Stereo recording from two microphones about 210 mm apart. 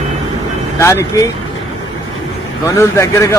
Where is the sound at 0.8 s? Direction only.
10° left (ahead or behind).